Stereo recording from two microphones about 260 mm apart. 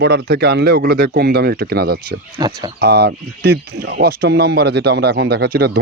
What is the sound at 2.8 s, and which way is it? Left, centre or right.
Speech, right.